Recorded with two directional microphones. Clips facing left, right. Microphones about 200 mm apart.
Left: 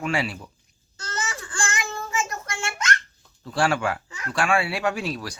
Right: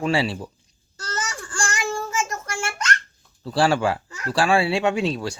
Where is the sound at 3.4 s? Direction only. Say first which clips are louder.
Right 4 dB; 30° right (ahead or behind).